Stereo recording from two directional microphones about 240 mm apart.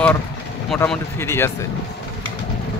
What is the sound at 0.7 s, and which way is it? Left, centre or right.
Speech, centre.